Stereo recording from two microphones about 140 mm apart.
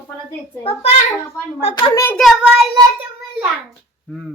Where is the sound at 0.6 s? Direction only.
45° left (ahead or behind).